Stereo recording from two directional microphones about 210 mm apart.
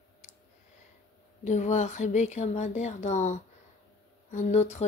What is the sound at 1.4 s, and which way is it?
Speech, 35° left (ahead or behind).